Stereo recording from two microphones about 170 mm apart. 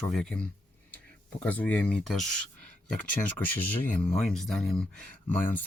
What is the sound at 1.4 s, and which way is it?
Speech, 10° left (ahead or behind).